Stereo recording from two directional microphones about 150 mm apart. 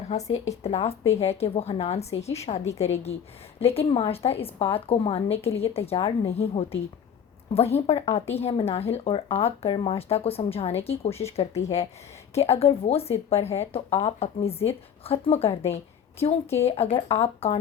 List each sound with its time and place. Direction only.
0.1 s a woman's voice: 45° left (ahead or behind)
16.6 s a woman's voice: 40° left (ahead or behind)